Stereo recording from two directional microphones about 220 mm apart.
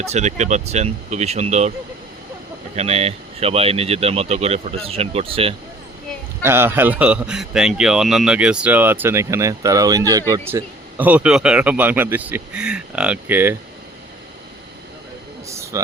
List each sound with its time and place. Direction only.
0.0 s speech: 30° right (ahead or behind)
2.7 s speech: 30° right (ahead or behind)
6.4 s speech: 10° right (ahead or behind)
15.4 s a sound: 15° right (ahead or behind)